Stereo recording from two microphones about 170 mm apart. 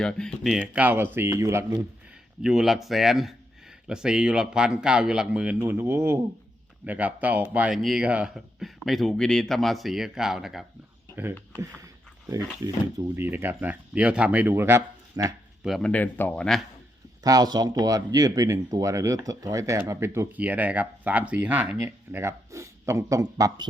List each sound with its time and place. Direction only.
0.0 s speech: 5° left (ahead or behind)
0.6 s speech: 10° right (ahead or behind)
2.4 s speech: centre (ahead or behind); by 15.3 s 20° right (ahead or behind)
15.6 s speech: centre (ahead or behind)
17.2 s speech: 20° right (ahead or behind)